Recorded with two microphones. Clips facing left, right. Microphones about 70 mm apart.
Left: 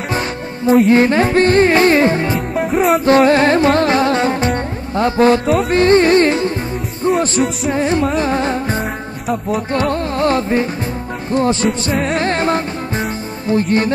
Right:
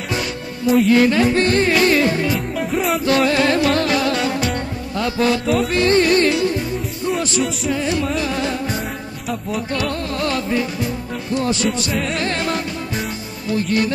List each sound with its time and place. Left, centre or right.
0.1 s music: left
3.1 s music: left
7.7 s music: left